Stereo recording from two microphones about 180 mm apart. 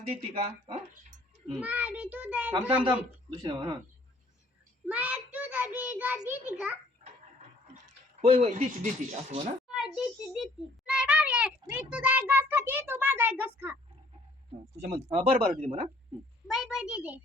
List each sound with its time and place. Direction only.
0.2 s speech: 35° right (ahead or behind)
1.5 s a child's voice: 10° right (ahead or behind)
3.2 s speech: 30° right (ahead or behind)
4.9 s a child's voice: 10° right (ahead or behind)
8.2 s speech: 35° right (ahead or behind)
9.6 s a child's voice: centre (ahead or behind)
14.8 s speech: 40° right (ahead or behind)
16.5 s a child's voice: centre (ahead or behind)